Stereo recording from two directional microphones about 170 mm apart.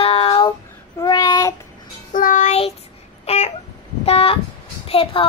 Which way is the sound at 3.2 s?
40° left (ahead or behind).